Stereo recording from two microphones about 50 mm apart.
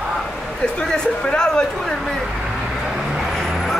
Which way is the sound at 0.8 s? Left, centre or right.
Centre.